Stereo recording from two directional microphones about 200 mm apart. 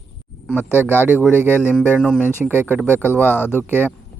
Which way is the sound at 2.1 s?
10° right (ahead or behind).